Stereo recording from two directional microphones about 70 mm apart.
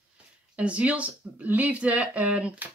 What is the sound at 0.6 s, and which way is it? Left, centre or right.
Speech, centre.